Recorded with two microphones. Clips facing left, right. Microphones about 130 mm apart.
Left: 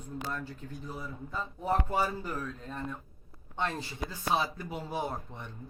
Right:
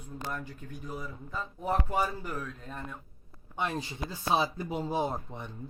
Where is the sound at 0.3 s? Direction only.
15° right (ahead or behind).